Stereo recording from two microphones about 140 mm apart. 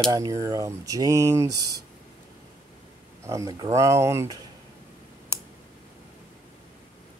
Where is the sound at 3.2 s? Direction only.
20° right (ahead or behind).